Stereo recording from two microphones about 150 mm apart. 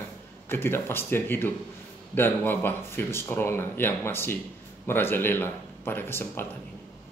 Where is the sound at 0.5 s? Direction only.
15° left (ahead or behind).